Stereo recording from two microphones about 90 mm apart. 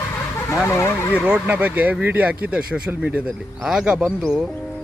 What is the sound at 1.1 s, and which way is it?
Speech, 15° right (ahead or behind).